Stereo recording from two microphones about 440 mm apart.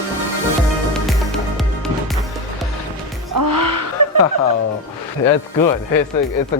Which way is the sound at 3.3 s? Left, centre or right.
Right.